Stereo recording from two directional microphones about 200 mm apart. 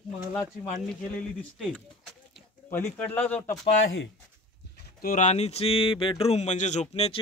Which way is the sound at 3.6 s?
65° left (ahead or behind).